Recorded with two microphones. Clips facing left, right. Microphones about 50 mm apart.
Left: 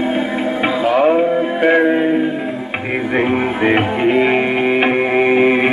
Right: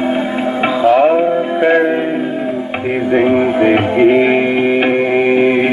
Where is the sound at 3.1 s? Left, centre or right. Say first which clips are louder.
Right 5 dB; centre.